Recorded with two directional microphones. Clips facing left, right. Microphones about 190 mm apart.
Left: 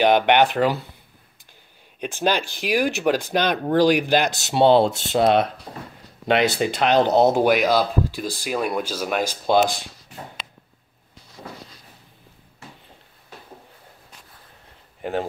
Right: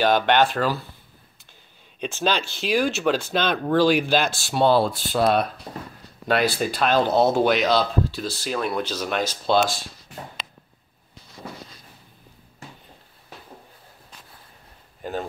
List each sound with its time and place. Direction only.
0.0 s speech: 15° left (ahead or behind)
2.0 s speech: 10° left (ahead or behind)